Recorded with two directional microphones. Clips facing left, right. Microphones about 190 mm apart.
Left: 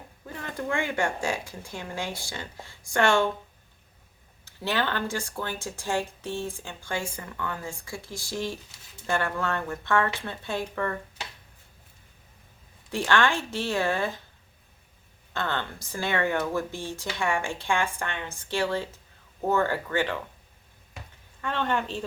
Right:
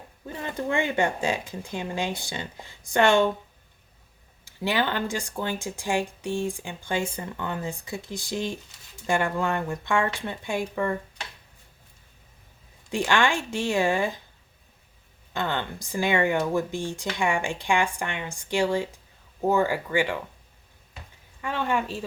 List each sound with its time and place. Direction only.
0.3 s speech: 20° right (ahead or behind)
4.4 s speech: 15° right (ahead or behind)
12.9 s speech: 15° right (ahead or behind)
15.3 s speech: 15° right (ahead or behind)
21.4 s speech: 10° right (ahead or behind)